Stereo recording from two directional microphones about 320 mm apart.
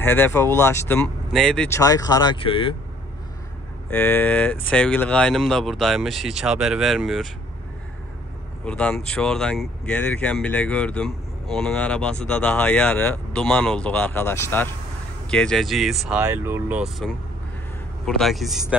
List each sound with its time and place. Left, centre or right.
0.0 s speech: centre
3.9 s speech: centre
8.6 s speech: centre